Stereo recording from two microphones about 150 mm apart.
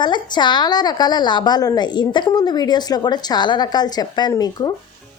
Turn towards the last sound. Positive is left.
turn(degrees=25)  # may be behind; listen again after turning